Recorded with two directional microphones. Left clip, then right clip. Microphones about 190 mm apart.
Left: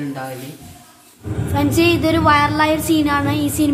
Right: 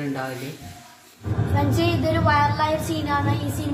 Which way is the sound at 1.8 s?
50° left (ahead or behind).